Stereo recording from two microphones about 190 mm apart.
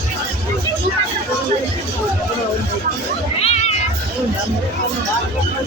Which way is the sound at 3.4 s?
35° left (ahead or behind).